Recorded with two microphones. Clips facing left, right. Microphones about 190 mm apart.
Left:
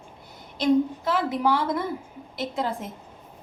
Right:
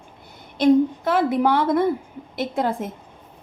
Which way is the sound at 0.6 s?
55° right (ahead or behind).